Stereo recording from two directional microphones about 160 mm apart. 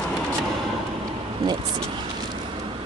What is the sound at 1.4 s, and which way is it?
Vehicle, 25° right (ahead or behind).